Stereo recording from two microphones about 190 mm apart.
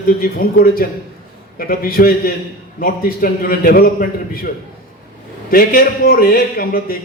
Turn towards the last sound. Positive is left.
turn(degrees=50)  # may be behind; listen again after turning